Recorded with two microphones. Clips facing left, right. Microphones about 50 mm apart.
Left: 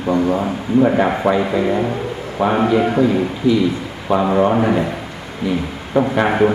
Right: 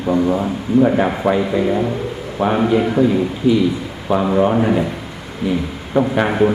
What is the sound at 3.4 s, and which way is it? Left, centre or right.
Speech, centre.